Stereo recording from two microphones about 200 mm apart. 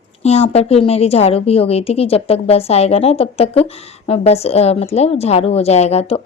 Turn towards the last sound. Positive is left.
turn(degrees=30)  # may be behind; listen again after turning